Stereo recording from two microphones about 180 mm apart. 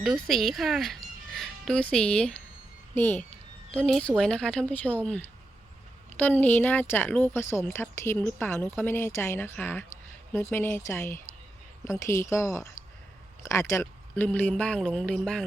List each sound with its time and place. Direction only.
0.0 s a woman's voice: centre (ahead or behind)